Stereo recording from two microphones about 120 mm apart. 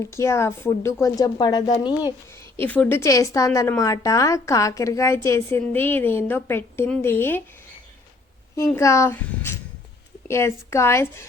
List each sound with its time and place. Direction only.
0.0 s a woman's voice: 25° left (ahead or behind)
2.3 s a woman's voice: 15° left (ahead or behind)
8.5 s a woman's voice: 25° left (ahead or behind)